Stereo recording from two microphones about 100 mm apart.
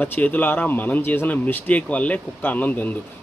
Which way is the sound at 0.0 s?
15° left (ahead or behind).